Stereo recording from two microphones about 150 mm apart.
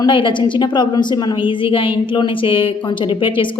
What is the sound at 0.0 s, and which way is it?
A woman's voice, 35° left (ahead or behind).